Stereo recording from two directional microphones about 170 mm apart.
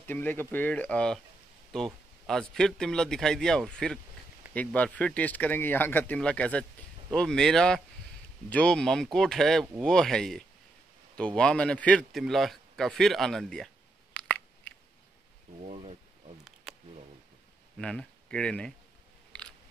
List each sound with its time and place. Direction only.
0.0 s a man's voice: 10° left (ahead or behind)
14.1 s chewing: 5° left (ahead or behind)
15.6 s speech: 40° right (ahead or behind)
17.7 s speech: 5° left (ahead or behind)